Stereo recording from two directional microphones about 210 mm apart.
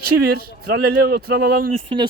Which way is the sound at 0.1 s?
50° right (ahead or behind).